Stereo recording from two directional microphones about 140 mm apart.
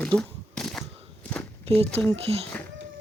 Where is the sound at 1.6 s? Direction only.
45° right (ahead or behind).